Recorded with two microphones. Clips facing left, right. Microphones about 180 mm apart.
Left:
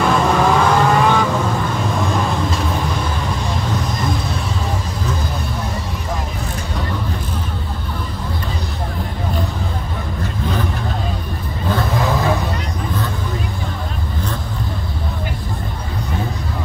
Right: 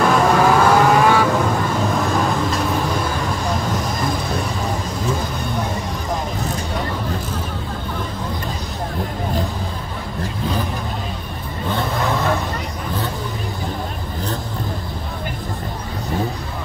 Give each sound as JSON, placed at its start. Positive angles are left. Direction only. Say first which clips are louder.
{"t": 0.0, "sound": "vehicle", "louder": "right 1 dB", "side_deg": 0}